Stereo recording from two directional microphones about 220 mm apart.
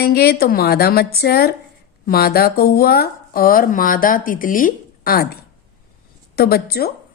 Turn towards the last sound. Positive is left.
turn(degrees=45)  # may be behind; listen again after turning